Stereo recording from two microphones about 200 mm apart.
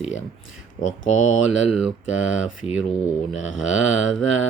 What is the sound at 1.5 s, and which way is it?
Mantra, 5° right (ahead or behind).